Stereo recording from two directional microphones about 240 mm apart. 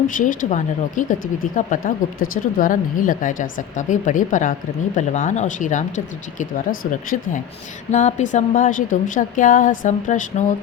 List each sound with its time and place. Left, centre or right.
0.1 s speech: left
7.9 s speech: left